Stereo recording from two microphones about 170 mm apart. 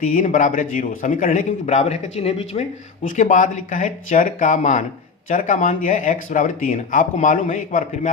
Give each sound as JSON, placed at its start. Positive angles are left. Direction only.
{"t": 0.1, "sound": "a man's voice", "side_deg": 50}